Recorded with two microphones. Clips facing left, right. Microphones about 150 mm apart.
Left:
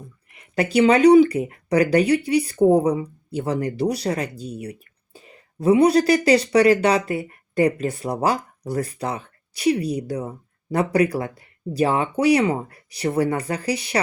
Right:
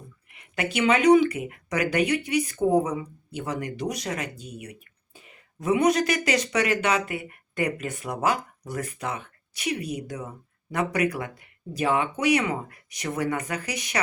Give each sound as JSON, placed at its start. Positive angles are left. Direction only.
{"t": 0.3, "sound": "speech", "side_deg": 35}